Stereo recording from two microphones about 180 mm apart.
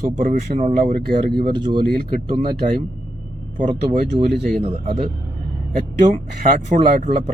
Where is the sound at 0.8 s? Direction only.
55° right (ahead or behind).